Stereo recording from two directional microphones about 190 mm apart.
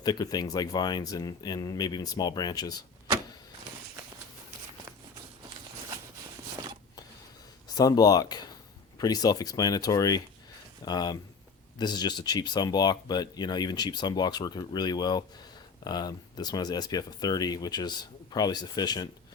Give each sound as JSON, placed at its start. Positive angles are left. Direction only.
{"t": 0.0, "sound": "speech", "side_deg": 20}
{"t": 7.8, "sound": "speech", "side_deg": 20}